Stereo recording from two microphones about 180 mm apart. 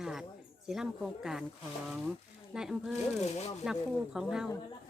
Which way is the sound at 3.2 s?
35° left (ahead or behind).